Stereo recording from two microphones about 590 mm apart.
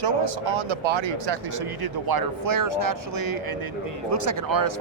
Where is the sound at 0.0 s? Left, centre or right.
Right.